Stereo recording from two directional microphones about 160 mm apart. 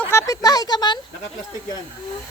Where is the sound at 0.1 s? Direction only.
20° left (ahead or behind).